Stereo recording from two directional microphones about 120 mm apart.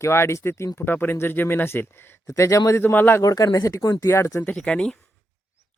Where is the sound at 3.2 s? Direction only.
30° left (ahead or behind).